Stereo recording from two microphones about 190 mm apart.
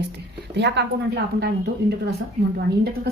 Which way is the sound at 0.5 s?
65° right (ahead or behind).